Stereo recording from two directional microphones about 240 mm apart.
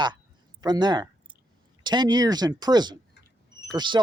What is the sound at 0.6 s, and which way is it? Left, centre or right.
Speech, centre.